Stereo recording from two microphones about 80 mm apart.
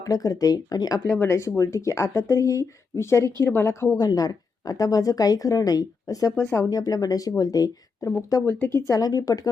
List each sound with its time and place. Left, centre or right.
0.0 s a woman's voice: left
1.1 s speech: left
1.4 s speech: left
3.9 s a woman's voice: left
6.4 s speech: left
6.7 s a woman's voice: left
8.4 s speech: left
8.9 s a woman's voice: left